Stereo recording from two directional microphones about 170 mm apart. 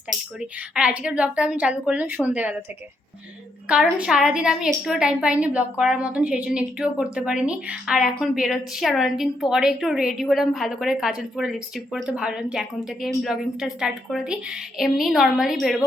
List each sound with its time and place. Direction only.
0.3 s a woman's voice: 5° right (ahead or behind)
3.7 s a woman's voice: 5° right (ahead or behind)